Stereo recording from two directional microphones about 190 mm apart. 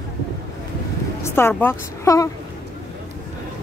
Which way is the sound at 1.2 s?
10° left (ahead or behind).